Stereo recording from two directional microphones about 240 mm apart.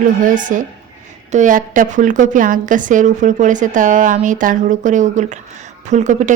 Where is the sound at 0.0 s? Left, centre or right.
Right.